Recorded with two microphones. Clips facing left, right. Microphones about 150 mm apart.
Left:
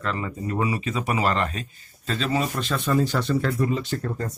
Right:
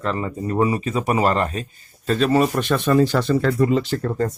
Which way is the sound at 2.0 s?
55° right (ahead or behind).